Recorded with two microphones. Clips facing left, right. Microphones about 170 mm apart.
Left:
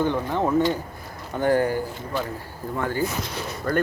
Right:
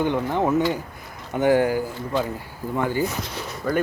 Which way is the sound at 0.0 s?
15° right (ahead or behind).